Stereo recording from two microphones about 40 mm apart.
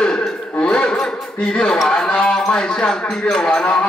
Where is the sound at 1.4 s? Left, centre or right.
Left.